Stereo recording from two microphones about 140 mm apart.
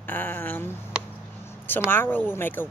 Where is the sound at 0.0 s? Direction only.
15° left (ahead or behind).